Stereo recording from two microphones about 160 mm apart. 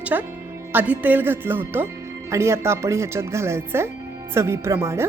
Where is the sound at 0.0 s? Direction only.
10° right (ahead or behind).